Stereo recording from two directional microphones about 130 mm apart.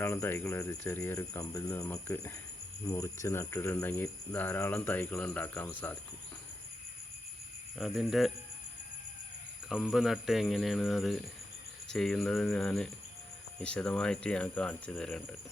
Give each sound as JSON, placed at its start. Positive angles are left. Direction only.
{"t": 0.0, "sound": "speech", "side_deg": 15}
{"t": 7.8, "sound": "speech", "side_deg": 0}
{"t": 9.9, "sound": "speech", "side_deg": 0}